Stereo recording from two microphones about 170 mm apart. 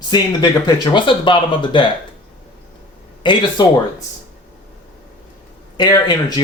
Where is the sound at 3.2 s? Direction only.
25° left (ahead or behind).